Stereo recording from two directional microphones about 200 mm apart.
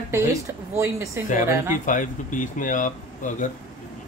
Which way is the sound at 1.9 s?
40° left (ahead or behind).